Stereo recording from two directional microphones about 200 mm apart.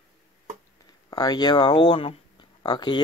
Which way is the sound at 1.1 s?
20° left (ahead or behind).